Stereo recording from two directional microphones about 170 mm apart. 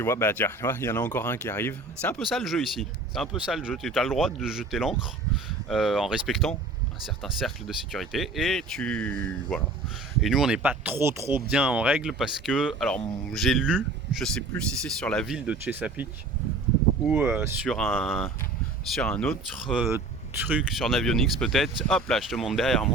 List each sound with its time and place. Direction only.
0.0 s speech: 15° left (ahead or behind); by 16.0 s 10° right (ahead or behind)
17.1 s speech: 10° right (ahead or behind)
17.7 s speech: 5° left (ahead or behind)